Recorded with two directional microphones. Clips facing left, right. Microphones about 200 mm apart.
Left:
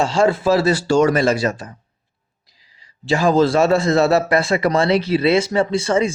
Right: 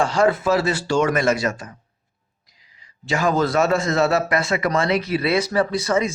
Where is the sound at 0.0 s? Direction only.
25° left (ahead or behind).